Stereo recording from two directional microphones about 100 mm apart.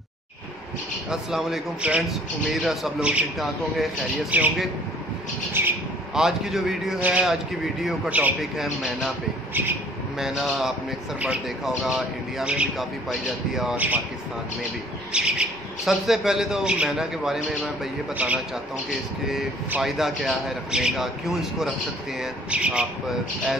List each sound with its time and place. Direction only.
1.1 s speech: 5° right (ahead or behind)
4.3 s speech: 15° right (ahead or behind)
5.6 s speech: 20° right (ahead or behind)
6.1 s speech: 5° right (ahead or behind)
8.4 s speech: centre (ahead or behind)
9.5 s speech: 20° right (ahead or behind)
10.1 s speech: 5° right (ahead or behind)
15.1 s speech: 10° right (ahead or behind)
18.9 s speech: 5° right (ahead or behind)